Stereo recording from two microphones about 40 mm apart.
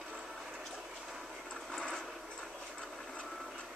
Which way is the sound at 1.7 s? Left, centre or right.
Centre.